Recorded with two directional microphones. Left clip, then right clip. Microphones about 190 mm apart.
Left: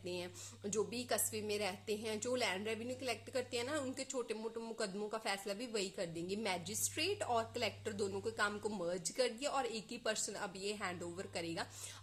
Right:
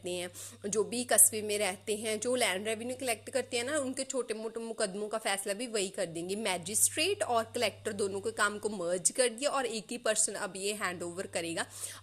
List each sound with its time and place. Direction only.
0.0 s a woman's voice: 25° right (ahead or behind)